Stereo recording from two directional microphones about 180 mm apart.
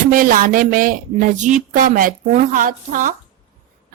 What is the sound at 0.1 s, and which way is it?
A woman's voice, 50° right (ahead or behind).